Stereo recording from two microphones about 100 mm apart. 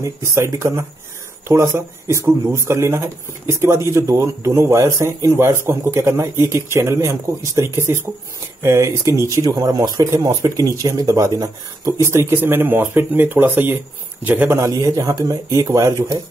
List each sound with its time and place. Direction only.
0.0 s a man's voice: 25° right (ahead or behind)
14.6 s speech: 35° right (ahead or behind)